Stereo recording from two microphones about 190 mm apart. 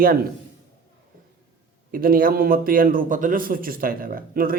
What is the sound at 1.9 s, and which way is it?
A man's voice, 50° right (ahead or behind).